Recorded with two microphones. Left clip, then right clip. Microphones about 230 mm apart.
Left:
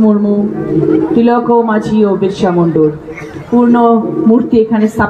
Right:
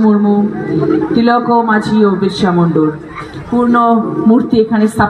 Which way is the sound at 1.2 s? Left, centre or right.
Right.